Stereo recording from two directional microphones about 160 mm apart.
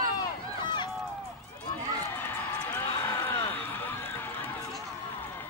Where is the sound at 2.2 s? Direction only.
15° left (ahead or behind).